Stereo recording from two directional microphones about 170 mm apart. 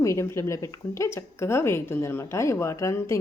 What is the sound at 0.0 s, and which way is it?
Speech, 15° left (ahead or behind).